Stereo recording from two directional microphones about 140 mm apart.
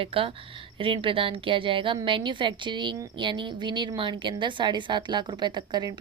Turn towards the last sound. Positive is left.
turn(degrees=-30)  # may be behind; listen again after turning